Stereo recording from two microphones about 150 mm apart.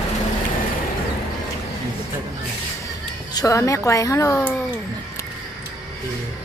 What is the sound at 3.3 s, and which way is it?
Speech, 20° left (ahead or behind).